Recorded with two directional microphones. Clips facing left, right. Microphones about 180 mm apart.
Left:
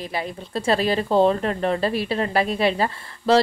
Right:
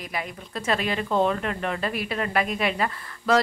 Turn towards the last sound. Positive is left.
turn(degrees=30)  # may be behind; listen again after turning